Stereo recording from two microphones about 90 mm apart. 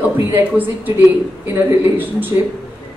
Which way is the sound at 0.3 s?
20° right (ahead or behind).